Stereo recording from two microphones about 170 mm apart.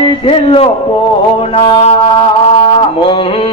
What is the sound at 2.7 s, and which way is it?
Mantra, 30° left (ahead or behind).